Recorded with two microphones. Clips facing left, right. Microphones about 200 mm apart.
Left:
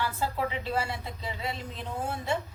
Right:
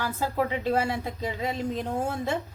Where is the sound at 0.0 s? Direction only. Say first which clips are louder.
Right 3 dB; 45° right (ahead or behind).